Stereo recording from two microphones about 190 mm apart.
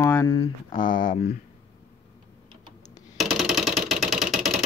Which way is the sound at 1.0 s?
45° left (ahead or behind).